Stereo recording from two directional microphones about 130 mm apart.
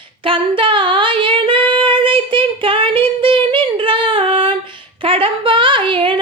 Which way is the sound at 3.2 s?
40° right (ahead or behind).